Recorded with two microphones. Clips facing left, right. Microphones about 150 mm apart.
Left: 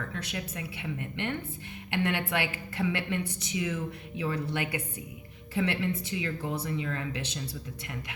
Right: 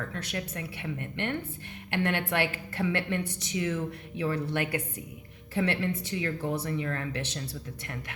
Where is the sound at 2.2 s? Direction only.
15° left (ahead or behind).